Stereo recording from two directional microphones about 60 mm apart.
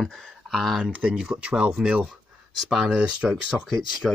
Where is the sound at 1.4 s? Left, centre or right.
Right.